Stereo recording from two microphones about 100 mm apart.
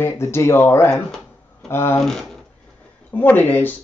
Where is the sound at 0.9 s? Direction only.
5° left (ahead or behind).